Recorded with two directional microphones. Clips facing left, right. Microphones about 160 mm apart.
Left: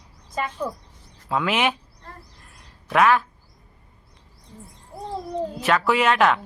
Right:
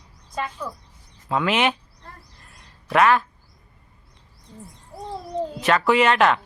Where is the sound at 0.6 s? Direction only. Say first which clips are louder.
Left 5 dB; 30° left (ahead or behind).